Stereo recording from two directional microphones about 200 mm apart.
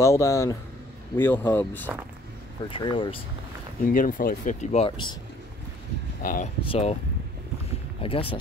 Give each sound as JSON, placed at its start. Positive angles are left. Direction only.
{"t": 0.0, "sound": "speech", "side_deg": 15}
{"t": 2.7, "sound": "speech", "side_deg": 25}
{"t": 3.8, "sound": "speech", "side_deg": 45}
{"t": 6.2, "sound": "speech", "side_deg": 45}
{"t": 6.6, "sound": "speech", "side_deg": 30}
{"t": 8.0, "sound": "speech", "side_deg": 25}